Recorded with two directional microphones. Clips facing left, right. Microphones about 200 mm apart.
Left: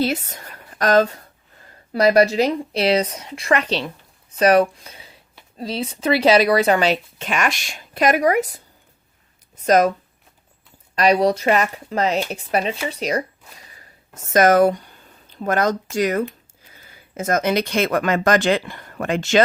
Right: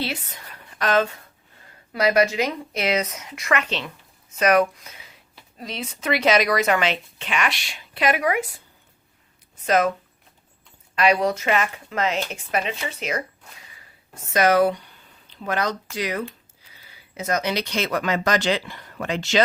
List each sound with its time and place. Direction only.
0.0 s speech: 40° left (ahead or behind)
10.9 s speech: 40° left (ahead or behind)
13.7 s a sound: 40° left (ahead or behind)
16.7 s speech: 45° left (ahead or behind)